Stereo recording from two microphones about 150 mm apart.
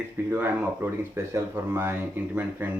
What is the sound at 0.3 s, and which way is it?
Speech, 15° right (ahead or behind).